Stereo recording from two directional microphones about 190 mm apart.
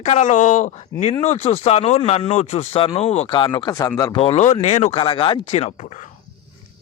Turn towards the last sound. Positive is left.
turn(degrees=35)  # may be behind; listen again after turning